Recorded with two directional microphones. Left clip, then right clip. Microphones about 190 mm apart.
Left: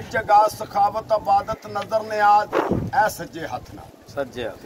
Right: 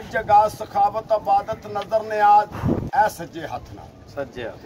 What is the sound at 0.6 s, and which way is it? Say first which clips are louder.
A man's voice: even; 15° right (ahead or behind).